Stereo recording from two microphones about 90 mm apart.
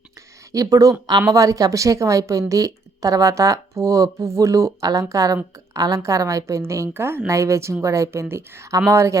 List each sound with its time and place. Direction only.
0.5 s a woman's voice: 40° right (ahead or behind)